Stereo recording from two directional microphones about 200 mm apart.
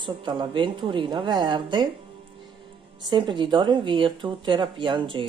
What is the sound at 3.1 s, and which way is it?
Speech, 25° right (ahead or behind).